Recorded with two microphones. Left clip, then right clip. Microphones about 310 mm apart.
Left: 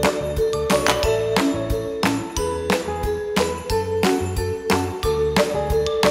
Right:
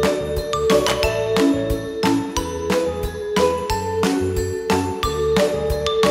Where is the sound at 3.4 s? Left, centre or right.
Centre.